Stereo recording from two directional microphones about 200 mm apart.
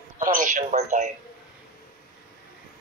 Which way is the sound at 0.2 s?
40° right (ahead or behind).